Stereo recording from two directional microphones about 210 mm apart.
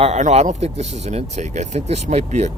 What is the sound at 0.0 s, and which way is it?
Speech, 30° right (ahead or behind).